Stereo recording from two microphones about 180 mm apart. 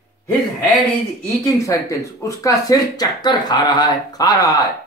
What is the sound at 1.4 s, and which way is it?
Speech, 15° left (ahead or behind).